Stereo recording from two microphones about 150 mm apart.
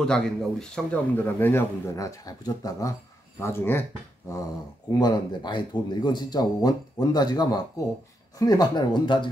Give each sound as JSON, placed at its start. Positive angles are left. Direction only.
{"t": 0.0, "sound": "a man's voice", "side_deg": 5}
{"t": 4.9, "sound": "speech", "side_deg": 30}